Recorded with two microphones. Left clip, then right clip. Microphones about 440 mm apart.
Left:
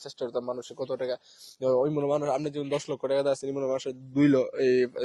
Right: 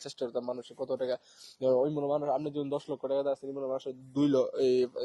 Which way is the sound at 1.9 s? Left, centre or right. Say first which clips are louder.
Left 3 dB; left.